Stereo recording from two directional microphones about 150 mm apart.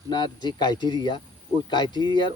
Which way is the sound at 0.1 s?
30° left (ahead or behind).